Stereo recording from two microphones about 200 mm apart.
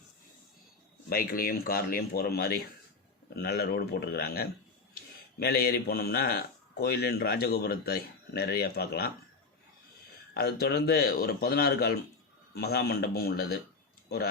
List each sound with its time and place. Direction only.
1.1 s a man's voice: 45° left (ahead or behind)
10.3 s a man's voice: 50° left (ahead or behind)